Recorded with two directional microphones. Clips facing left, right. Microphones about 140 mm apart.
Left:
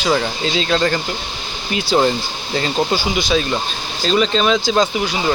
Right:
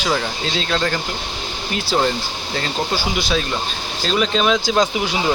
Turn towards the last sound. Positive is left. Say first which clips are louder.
# left 1 dB
turn(degrees=-10)  # may be behind; listen again after turning